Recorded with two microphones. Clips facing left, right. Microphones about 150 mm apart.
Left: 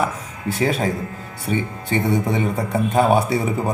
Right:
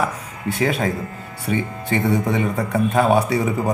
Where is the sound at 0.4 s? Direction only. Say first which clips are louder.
Even; 35° left (ahead or behind).